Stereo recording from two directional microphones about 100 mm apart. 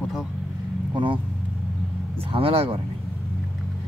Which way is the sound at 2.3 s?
65° right (ahead or behind).